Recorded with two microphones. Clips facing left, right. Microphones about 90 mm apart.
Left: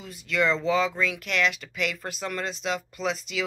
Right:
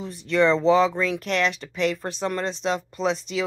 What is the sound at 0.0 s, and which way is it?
Speech, 30° right (ahead or behind).